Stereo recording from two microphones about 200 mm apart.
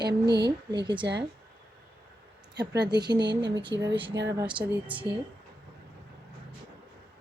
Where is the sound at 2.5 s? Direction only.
55° right (ahead or behind).